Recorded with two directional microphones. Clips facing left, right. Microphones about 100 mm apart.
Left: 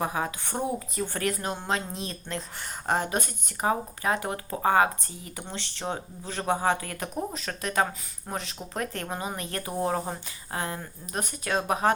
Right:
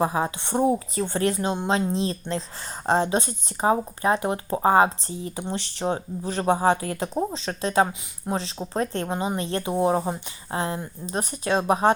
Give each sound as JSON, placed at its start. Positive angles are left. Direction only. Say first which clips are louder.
{"t": 0.0, "sound": "speech", "louder": "right 5 dB", "side_deg": -30}